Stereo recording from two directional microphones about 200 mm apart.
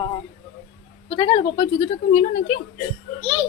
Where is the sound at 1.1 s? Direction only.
30° left (ahead or behind).